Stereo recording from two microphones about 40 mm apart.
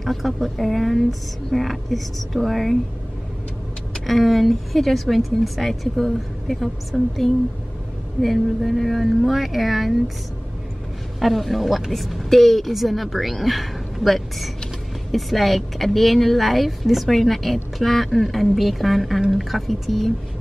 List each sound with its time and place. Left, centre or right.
0.0 s speech: centre
4.0 s speech: centre
11.1 s speech: centre